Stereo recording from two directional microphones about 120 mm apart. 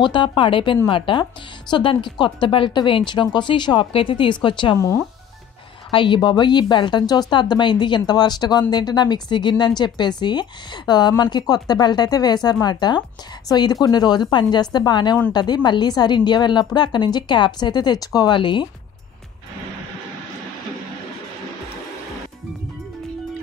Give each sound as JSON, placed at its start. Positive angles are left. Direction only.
{"t": 0.0, "sound": "speech", "side_deg": 40}
{"t": 5.9, "sound": "speech", "side_deg": 45}